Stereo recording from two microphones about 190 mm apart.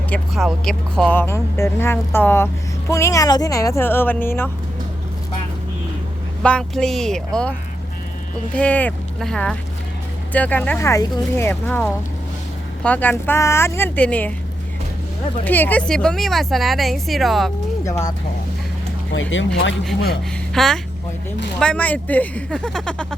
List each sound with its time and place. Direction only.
0.1 s speech: centre (ahead or behind)
6.4 s speech: 5° left (ahead or behind)
8.5 s speech: 10° left (ahead or behind)
15.4 s speech: 10° left (ahead or behind)
17.8 s speech: 15° left (ahead or behind)
19.1 s speech: 80° left
20.5 s speech: centre (ahead or behind)